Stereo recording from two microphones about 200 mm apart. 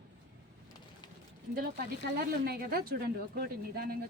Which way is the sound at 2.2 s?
50° right (ahead or behind).